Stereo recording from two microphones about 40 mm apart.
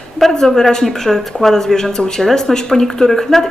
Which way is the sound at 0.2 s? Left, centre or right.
Centre.